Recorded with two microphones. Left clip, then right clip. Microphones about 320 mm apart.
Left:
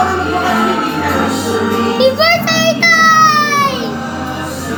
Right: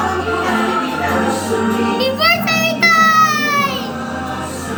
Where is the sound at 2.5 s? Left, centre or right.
Centre.